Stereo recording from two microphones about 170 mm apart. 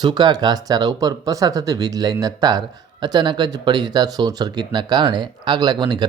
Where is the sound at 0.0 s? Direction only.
25° right (ahead or behind).